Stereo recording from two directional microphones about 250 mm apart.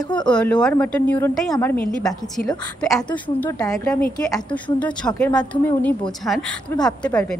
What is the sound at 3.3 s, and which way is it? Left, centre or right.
A woman's voice, centre.